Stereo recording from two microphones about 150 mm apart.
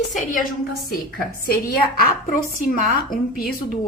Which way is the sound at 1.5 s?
85° left.